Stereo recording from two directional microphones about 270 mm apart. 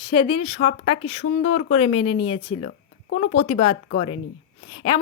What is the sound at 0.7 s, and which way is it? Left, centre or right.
Speech, left.